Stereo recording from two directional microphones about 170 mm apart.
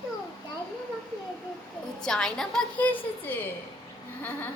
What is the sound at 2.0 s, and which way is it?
A woman's voice, 5° left (ahead or behind).